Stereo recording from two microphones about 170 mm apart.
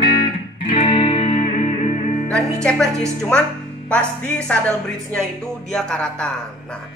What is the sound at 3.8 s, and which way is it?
Music, 5° left (ahead or behind).